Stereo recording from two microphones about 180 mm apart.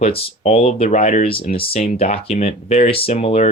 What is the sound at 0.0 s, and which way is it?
Speech, 35° left (ahead or behind).